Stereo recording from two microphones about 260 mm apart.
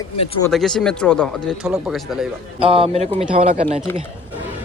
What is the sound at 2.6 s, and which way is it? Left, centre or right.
A man's voice, right.